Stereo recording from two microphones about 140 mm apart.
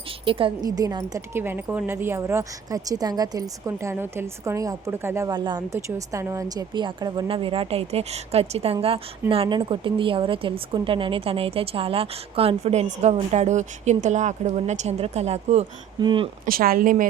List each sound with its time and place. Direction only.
0.3 s speech: 40° right (ahead or behind)
0.6 s speech: 25° right (ahead or behind)
5.4 s speech: 35° right (ahead or behind)
5.7 s a woman's voice: 20° right (ahead or behind); by 15.6 s 50° right (ahead or behind)
16.0 s speech: 35° right (ahead or behind)
16.5 s speech: 90° right